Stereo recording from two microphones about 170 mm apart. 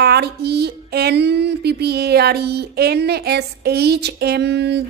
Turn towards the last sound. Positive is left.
turn(degrees=-80)